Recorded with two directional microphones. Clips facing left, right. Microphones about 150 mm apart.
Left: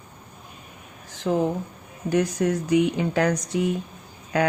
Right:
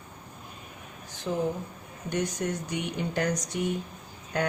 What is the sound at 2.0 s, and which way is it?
Speech, 90° left.